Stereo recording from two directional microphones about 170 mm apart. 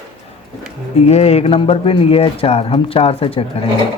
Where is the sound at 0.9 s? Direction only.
40° left (ahead or behind).